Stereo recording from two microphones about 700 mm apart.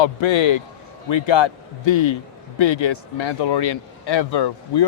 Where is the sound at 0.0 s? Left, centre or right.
Left.